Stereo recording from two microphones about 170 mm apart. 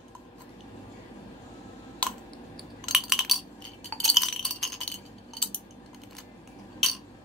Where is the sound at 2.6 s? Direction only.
Centre (ahead or behind).